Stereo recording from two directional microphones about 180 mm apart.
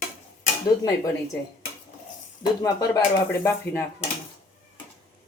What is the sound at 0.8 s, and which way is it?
Speech, 20° left (ahead or behind).